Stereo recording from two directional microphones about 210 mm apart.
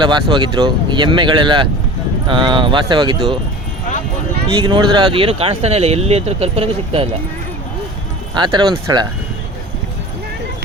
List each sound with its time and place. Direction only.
0.0 s speech: 20° right (ahead or behind)
4.6 s speech: 20° right (ahead or behind)
8.4 s speech: 20° right (ahead or behind)